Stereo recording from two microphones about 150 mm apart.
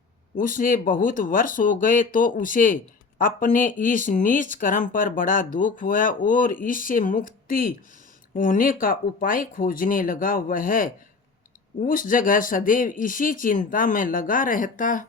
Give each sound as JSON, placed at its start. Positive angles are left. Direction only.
{"t": 0.3, "sound": "speech", "side_deg": 65}